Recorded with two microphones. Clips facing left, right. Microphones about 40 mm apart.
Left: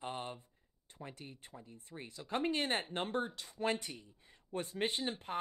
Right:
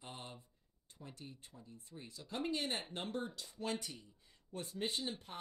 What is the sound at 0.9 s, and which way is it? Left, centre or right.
Speech, left.